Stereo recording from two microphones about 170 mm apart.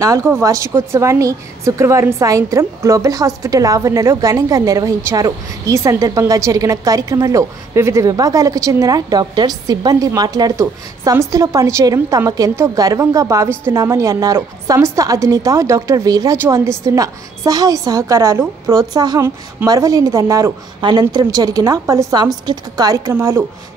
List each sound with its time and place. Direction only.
0.0 s a woman's voice: 15° right (ahead or behind)